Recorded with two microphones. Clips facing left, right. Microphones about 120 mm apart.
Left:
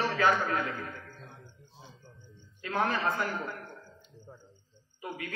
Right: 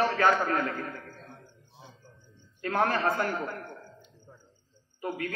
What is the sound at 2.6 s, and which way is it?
A man's voice, 50° right (ahead or behind).